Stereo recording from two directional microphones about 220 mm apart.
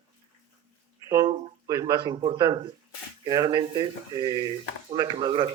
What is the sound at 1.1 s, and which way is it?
Speech, 15° right (ahead or behind).